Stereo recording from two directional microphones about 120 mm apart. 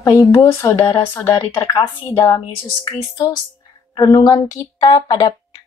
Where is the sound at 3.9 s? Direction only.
30° left (ahead or behind).